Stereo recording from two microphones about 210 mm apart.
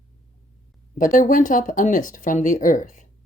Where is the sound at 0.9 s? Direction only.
40° left (ahead or behind).